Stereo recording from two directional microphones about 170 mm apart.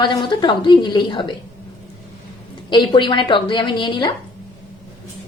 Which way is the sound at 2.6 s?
25° left (ahead or behind).